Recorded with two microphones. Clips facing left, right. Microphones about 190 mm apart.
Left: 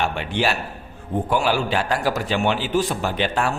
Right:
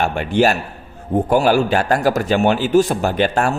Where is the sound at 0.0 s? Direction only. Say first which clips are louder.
Right 7 dB; 45° right (ahead or behind).